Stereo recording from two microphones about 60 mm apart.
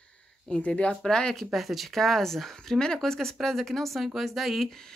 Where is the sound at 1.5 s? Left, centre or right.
Centre.